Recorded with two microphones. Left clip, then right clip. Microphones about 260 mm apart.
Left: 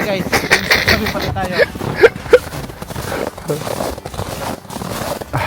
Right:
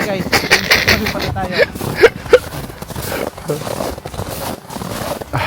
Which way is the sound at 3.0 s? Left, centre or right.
Centre.